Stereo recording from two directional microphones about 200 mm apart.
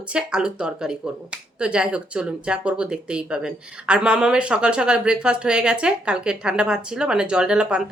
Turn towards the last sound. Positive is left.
turn(degrees=-5)  # may be behind; listen again after turning